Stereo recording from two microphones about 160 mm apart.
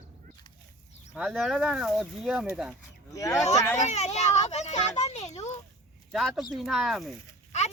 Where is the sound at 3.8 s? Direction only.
45° left (ahead or behind).